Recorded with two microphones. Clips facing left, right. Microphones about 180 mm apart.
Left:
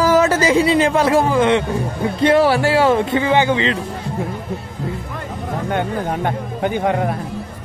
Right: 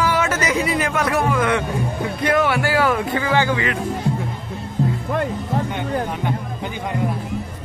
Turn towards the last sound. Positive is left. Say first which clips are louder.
# left 9 dB
turn(degrees=55)  # may be behind; listen again after turning